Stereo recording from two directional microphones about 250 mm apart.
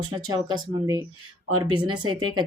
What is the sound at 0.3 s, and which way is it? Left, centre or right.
A woman's voice, centre.